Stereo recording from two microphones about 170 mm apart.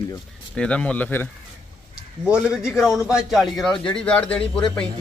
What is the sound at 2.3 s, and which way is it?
Speech, 5° right (ahead or behind).